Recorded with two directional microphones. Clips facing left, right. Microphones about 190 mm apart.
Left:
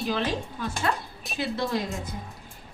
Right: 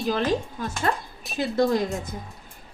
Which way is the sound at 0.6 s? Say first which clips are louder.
Right 2 dB; 45° right (ahead or behind).